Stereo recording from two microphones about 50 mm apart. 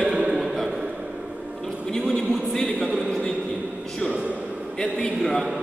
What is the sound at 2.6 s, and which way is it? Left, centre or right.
Speech, centre.